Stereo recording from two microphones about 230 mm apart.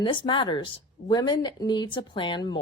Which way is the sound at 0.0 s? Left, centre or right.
Left.